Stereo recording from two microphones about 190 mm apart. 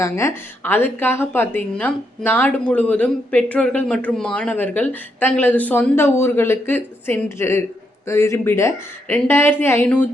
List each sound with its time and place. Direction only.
0.0 s speech: 15° left (ahead or behind)